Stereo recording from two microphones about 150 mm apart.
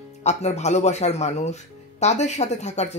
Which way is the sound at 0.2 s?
45° left (ahead or behind).